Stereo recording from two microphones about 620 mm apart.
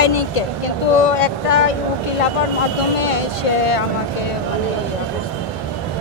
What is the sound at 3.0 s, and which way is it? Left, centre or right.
Speech, left.